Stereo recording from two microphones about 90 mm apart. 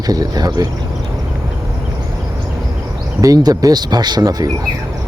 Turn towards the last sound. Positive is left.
turn(degrees=-45)  # may be behind; listen again after turning